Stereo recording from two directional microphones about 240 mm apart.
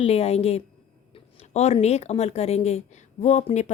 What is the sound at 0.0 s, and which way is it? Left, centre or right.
Speech, left.